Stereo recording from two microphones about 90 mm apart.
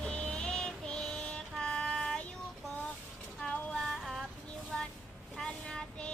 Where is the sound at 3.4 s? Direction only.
5° left (ahead or behind).